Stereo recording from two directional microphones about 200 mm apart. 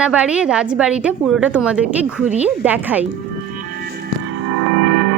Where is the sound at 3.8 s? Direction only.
50° right (ahead or behind).